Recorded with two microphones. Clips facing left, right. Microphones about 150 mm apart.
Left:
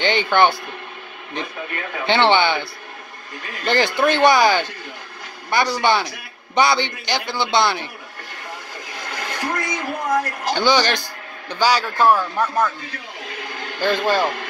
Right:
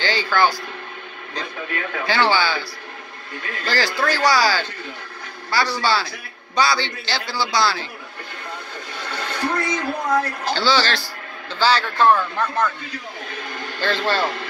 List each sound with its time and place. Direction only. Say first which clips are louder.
0.0 s a man's voice: left 3 dB; 20° left (ahead or behind)
2.0 s a man's voice: left 4 dB; 25° left (ahead or behind)
3.6 s a man's voice: left 4 dB; 20° left (ahead or behind)
9.1 s a sound: right 2 dB; 10° left (ahead or behind)
11.5 s a man's voice: left 1 dB; 10° left (ahead or behind)
13.7 s a man's voice: left 3 dB; 15° left (ahead or behind)